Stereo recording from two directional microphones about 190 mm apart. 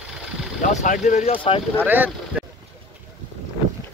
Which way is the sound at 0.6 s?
40° left (ahead or behind).